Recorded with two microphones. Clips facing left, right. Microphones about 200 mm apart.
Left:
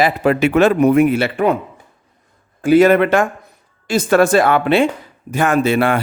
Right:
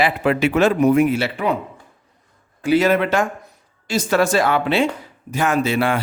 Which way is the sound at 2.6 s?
50° left (ahead or behind).